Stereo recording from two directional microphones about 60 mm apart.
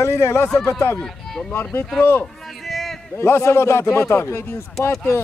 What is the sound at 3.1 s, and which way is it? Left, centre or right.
A man's voice, left.